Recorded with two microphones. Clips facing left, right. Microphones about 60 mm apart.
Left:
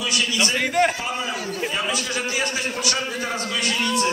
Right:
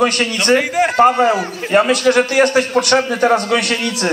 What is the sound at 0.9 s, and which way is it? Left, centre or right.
A man's voice, right.